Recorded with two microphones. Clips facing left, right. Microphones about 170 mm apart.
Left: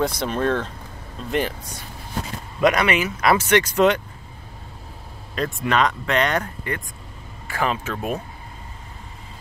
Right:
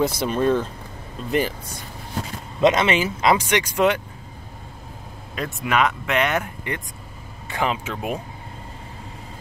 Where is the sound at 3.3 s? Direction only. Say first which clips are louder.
Left 3 dB; 15° right (ahead or behind).